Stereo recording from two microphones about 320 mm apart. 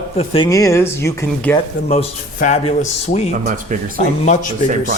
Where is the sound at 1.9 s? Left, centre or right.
Left.